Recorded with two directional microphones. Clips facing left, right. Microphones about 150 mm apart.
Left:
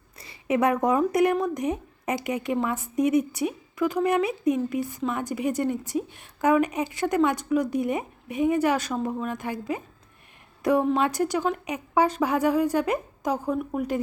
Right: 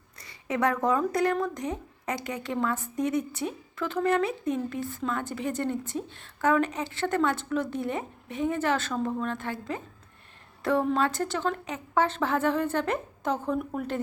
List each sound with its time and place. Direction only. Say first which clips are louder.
0.2 s a woman's voice: left 4 dB; 25° left (ahead or behind)